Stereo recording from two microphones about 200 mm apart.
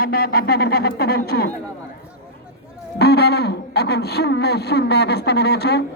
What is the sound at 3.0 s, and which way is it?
Speech, 55° left (ahead or behind).